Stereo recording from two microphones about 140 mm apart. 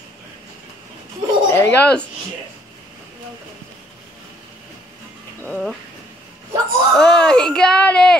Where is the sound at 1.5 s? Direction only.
10° left (ahead or behind).